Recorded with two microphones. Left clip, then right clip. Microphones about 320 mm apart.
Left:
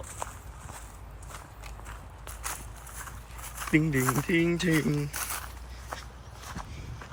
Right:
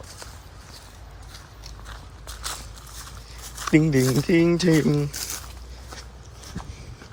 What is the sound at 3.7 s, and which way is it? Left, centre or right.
Speech, centre.